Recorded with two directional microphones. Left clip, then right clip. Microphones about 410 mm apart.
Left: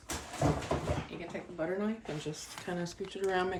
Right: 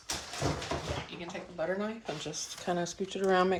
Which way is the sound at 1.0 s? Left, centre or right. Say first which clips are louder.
Even; centre.